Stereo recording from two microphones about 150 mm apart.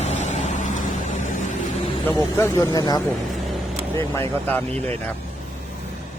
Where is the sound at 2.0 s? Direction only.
20° left (ahead or behind).